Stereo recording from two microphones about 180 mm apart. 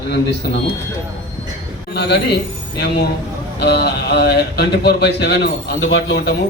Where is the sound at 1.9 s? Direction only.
65° left (ahead or behind).